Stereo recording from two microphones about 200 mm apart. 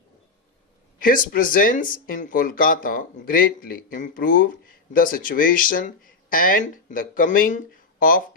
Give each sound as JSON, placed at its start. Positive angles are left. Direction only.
{"t": 0.9, "sound": "speech", "side_deg": 45}